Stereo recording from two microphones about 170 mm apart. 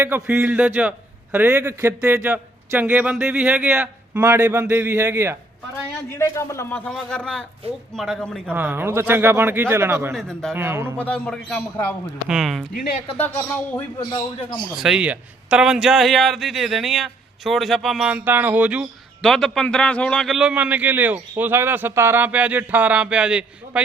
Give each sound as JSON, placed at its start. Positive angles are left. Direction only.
{"t": 0.0, "sound": "a man's voice", "side_deg": -10}
{"t": 6.1, "sound": "a man's voice", "side_deg": 15}
{"t": 8.5, "sound": "a man's voice", "side_deg": -10}
{"t": 10.2, "sound": "a man's voice", "side_deg": 5}
{"t": 10.5, "sound": "a man's voice", "side_deg": -15}
{"t": 10.9, "sound": "a man's voice", "side_deg": 5}
{"t": 13.1, "sound": "a man's voice", "side_deg": 10}
{"t": 14.0, "sound": "speech", "side_deg": 30}
{"t": 14.8, "sound": "a man's voice", "side_deg": -5}